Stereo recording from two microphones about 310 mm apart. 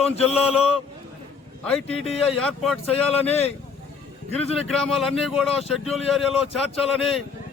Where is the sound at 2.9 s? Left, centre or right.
Centre.